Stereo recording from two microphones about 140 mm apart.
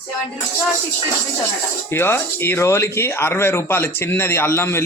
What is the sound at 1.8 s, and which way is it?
Speech, 15° left (ahead or behind).